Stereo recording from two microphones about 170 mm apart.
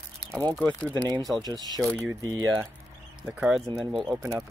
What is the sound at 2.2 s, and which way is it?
Speech, 25° right (ahead or behind).